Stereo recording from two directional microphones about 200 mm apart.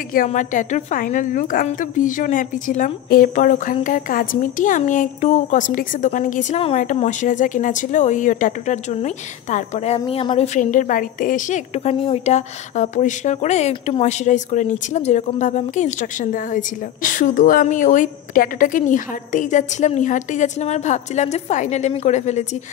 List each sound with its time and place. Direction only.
0.1 s speech: 40° left (ahead or behind)